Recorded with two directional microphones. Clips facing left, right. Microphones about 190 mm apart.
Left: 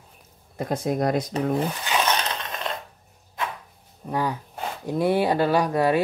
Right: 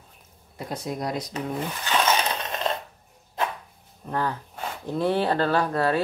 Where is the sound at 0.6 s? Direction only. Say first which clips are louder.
Left 6 dB; 50° left (ahead or behind).